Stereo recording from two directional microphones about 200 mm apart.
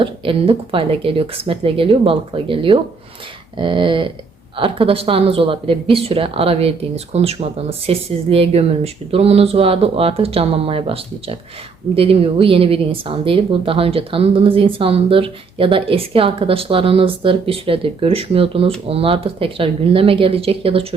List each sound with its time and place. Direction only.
0.0 s speech: 25° right (ahead or behind)